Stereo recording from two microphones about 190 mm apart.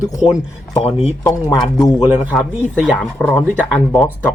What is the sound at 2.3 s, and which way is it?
Speech, centre (ahead or behind).